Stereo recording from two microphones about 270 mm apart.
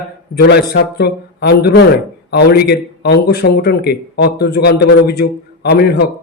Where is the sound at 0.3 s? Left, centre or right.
Left.